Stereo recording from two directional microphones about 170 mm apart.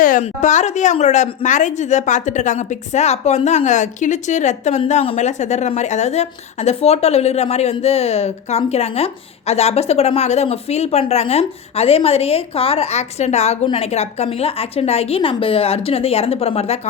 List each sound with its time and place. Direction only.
0.0 s a woman's voice: 50° left (ahead or behind)